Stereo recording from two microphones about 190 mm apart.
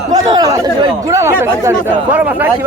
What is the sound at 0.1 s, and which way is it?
Chatter, 20° right (ahead or behind).